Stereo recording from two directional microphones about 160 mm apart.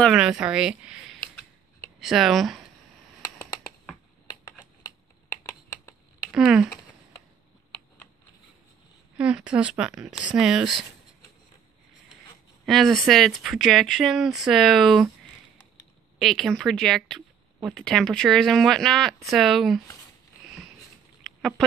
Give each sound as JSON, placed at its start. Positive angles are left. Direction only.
{"t": 0.0, "sound": "speech", "side_deg": -5}
{"t": 4.8, "sound": "computer keyboard", "side_deg": 20}
{"t": 6.3, "sound": "speech", "side_deg": -5}
{"t": 9.2, "sound": "speech", "side_deg": -5}
{"t": 12.6, "sound": "speech", "side_deg": 0}
{"t": 21.2, "sound": "a sound", "side_deg": 0}